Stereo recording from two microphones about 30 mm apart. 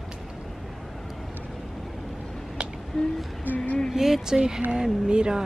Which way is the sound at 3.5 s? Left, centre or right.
Right.